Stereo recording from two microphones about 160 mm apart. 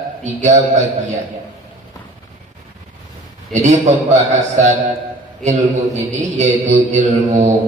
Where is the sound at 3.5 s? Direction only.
45° right (ahead or behind).